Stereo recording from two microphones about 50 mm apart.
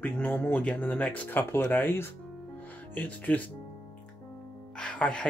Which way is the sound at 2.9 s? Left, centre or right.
Left.